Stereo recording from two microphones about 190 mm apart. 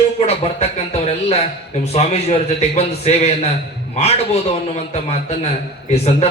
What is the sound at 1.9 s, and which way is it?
A man's voice, 35° left (ahead or behind).